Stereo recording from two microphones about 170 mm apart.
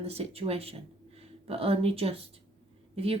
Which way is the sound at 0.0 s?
35° right (ahead or behind).